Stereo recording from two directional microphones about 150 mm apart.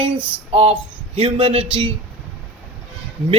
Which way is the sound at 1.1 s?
35° right (ahead or behind).